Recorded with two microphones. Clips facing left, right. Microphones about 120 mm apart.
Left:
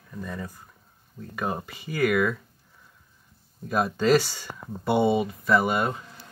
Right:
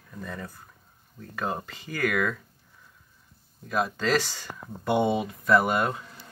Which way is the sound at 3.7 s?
10° left (ahead or behind).